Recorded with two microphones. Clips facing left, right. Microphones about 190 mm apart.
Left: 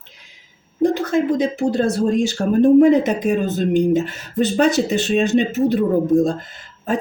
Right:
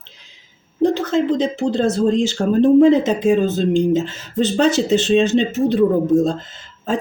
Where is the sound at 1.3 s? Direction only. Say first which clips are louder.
Even; 25° right (ahead or behind).